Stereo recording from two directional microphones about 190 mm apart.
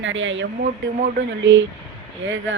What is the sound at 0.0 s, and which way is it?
Speech, 85° right.